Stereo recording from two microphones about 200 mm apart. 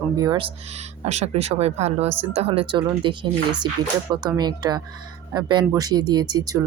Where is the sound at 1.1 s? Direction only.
35° right (ahead or behind).